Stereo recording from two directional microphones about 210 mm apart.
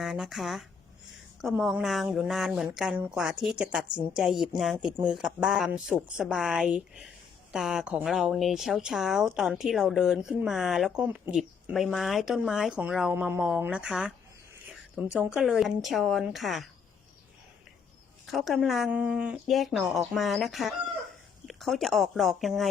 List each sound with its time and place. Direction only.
0.0 s speech: centre (ahead or behind)
18.3 s speech: centre (ahead or behind)